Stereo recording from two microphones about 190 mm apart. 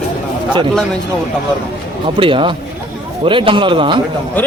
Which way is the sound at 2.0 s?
25° right (ahead or behind).